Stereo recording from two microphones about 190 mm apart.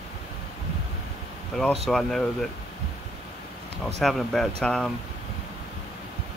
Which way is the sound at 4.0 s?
Centre (ahead or behind).